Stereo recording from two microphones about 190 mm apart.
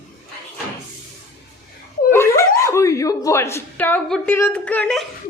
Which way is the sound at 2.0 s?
15° left (ahead or behind).